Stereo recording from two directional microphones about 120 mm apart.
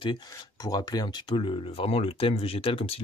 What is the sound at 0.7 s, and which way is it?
Speech, 35° left (ahead or behind).